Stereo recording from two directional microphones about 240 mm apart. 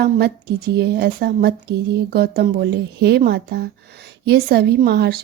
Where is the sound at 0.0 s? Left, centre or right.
Right.